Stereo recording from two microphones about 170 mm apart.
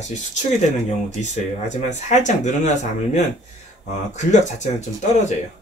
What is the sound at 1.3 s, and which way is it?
Speech, 45° left (ahead or behind).